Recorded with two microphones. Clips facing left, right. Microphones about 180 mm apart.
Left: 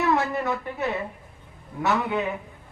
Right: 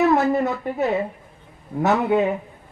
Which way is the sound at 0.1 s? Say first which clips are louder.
Right 5 dB; 45° right (ahead or behind).